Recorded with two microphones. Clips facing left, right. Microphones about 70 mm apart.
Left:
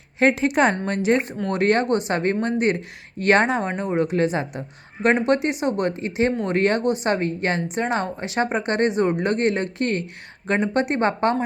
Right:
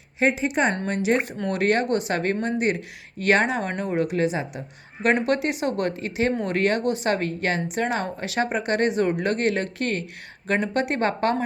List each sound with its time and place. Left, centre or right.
0.2 s speech: left
0.9 s speech: left
3.7 s speech: left
5.2 s speech: left